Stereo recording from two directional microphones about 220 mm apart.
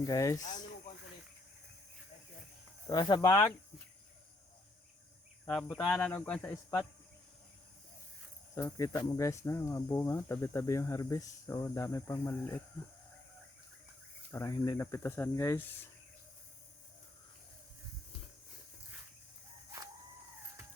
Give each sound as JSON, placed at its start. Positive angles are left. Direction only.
{"t": 0.0, "sound": "speech", "side_deg": 15}
{"t": 0.4, "sound": "snake", "side_deg": 35}
{"t": 2.9, "sound": "speech", "side_deg": 20}
{"t": 5.5, "sound": "speech", "side_deg": 5}
{"t": 8.5, "sound": "speech", "side_deg": 15}
{"t": 14.3, "sound": "speech", "side_deg": 15}